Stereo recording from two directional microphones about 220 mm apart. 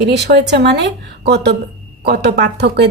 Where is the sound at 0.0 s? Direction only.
50° right (ahead or behind).